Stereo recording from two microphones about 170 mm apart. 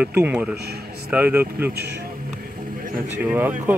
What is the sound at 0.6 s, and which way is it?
Speech, 70° right (ahead or behind).